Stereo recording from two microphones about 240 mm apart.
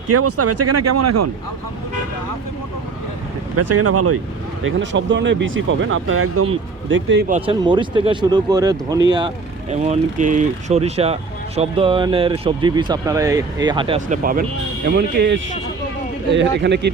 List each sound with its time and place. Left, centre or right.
0.1 s speech: right
3.5 s speech: right
4.6 s speech: right
6.9 s speech: right
7.3 s speech: right
9.6 s speech: right